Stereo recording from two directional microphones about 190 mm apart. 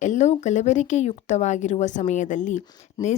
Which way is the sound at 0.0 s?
40° left (ahead or behind).